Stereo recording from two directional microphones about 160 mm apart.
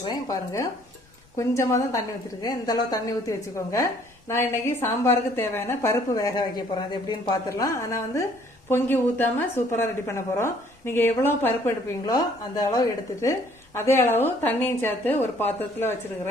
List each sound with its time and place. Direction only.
0.1 s a woman's voice: 25° left (ahead or behind)